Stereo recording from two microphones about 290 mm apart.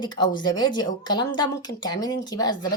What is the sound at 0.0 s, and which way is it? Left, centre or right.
A woman's voice, centre.